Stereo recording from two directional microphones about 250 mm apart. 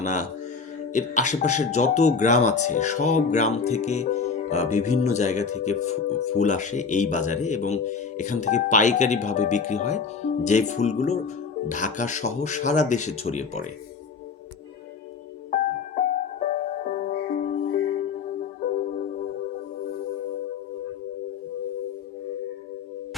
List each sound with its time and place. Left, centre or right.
0.0 s speech: left
15.5 s music: left